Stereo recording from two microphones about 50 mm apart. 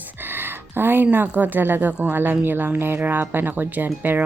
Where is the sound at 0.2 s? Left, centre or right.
Right.